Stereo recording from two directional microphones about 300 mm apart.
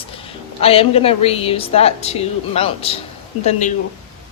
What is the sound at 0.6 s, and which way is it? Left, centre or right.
A woman's voice, centre.